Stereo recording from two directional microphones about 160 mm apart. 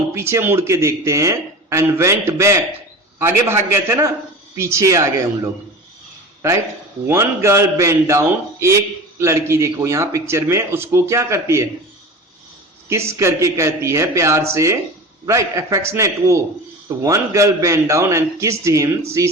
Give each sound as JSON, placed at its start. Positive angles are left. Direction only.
{"t": 0.1, "sound": "a man's voice", "side_deg": -15}
{"t": 7.1, "sound": "a man's voice", "side_deg": -15}
{"t": 12.9, "sound": "a man's voice", "side_deg": -15}